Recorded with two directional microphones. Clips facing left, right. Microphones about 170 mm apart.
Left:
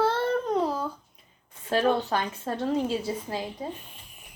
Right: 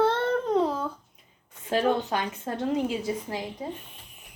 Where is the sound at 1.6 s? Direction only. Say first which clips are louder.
Even; 20° right (ahead or behind).